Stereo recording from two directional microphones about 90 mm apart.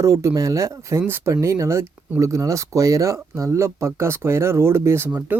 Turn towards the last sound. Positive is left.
turn(degrees=-30)  # may be behind; listen again after turning